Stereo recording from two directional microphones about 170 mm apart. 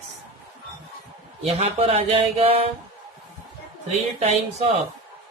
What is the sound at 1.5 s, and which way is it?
Speech, 35° right (ahead or behind).